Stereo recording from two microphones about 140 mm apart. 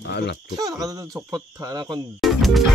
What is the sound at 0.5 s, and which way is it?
Speech, 25° right (ahead or behind).